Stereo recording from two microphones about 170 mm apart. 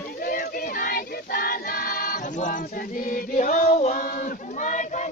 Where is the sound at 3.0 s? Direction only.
50° left (ahead or behind).